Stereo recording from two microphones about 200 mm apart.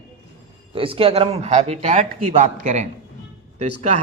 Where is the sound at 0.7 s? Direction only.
25° right (ahead or behind).